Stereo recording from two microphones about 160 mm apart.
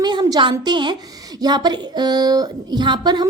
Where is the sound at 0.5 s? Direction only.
30° right (ahead or behind).